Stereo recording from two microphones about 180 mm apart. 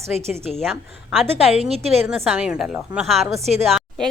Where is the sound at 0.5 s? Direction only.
Centre (ahead or behind).